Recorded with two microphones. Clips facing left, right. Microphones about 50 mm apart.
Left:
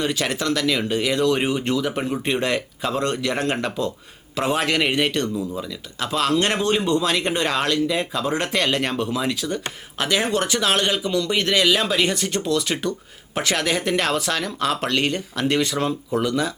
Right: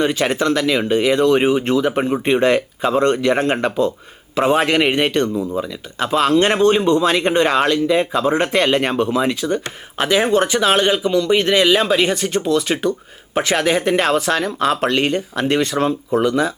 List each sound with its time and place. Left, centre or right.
0.0 s speech: right